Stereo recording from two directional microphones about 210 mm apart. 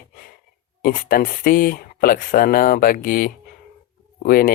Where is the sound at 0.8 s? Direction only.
40° left (ahead or behind).